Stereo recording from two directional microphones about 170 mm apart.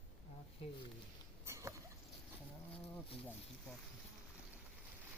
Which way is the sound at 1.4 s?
15° right (ahead or behind).